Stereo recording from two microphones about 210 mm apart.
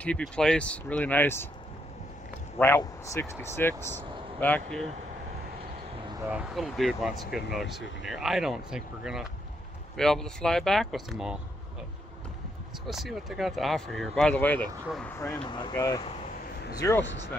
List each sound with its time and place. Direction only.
0.0 s speech: 5° left (ahead or behind)
2.6 s speech: 10° left (ahead or behind)
6.3 s speech: centre (ahead or behind)
12.8 s speech: centre (ahead or behind)
15.1 s speech: 20° left (ahead or behind)